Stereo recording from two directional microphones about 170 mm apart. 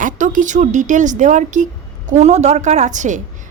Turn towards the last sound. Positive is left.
turn(degrees=-45)  # may be behind; listen again after turning